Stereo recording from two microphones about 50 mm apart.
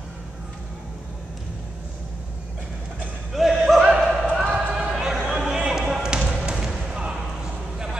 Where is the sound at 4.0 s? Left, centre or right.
Centre.